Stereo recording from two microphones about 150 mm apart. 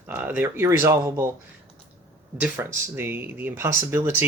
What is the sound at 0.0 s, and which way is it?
Speech, 10° right (ahead or behind).